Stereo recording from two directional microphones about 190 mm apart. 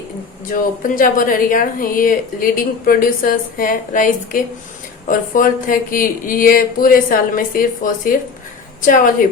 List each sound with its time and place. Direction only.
0.5 s a woman's voice: 45° left (ahead or behind)